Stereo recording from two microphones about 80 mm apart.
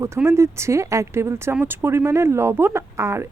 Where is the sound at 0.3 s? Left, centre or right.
Right.